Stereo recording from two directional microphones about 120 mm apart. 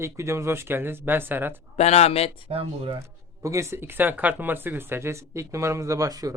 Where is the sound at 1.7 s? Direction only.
65° left (ahead or behind).